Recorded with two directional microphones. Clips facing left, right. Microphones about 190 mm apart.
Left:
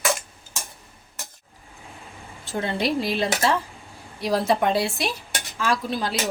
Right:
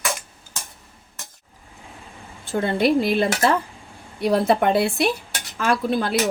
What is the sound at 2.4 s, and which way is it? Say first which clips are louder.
A woman's voice: right 5 dB; 55° right (ahead or behind).